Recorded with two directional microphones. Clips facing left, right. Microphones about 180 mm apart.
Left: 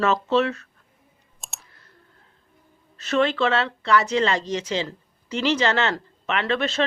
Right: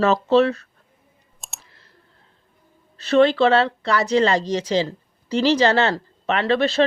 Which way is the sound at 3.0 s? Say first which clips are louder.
Right 6 dB; 35° right (ahead or behind).